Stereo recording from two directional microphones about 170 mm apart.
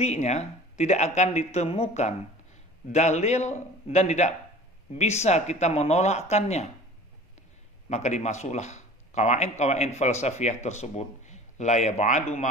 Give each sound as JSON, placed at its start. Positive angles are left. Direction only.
{"t": 0.0, "sound": "a man's voice", "side_deg": 40}
{"t": 7.9, "sound": "a man's voice", "side_deg": 40}